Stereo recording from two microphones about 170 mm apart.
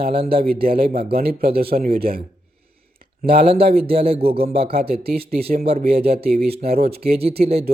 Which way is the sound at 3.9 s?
35° right (ahead or behind).